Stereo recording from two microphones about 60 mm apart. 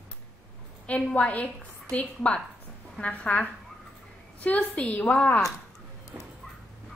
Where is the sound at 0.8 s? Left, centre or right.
Left.